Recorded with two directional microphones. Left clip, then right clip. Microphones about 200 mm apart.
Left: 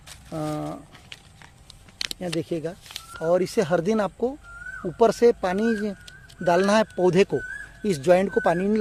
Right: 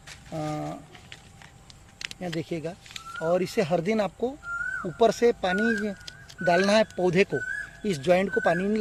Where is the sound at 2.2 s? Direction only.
35° left (ahead or behind).